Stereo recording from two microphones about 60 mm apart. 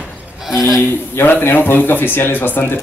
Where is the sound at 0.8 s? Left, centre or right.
Left.